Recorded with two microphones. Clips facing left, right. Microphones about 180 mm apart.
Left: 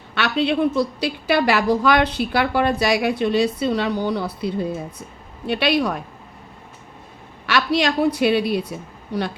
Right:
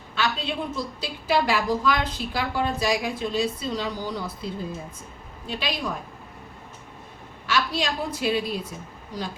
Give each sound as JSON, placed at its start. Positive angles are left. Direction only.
{"t": 0.1, "sound": "a woman's voice", "side_deg": 70}
{"t": 7.4, "sound": "a woman's voice", "side_deg": 70}